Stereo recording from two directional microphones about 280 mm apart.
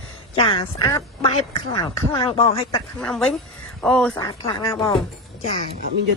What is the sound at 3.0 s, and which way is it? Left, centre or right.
Speech, centre.